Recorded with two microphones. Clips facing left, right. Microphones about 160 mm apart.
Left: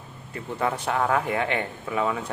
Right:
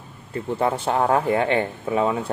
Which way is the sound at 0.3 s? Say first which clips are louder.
Right 5 dB; 30° right (ahead or behind).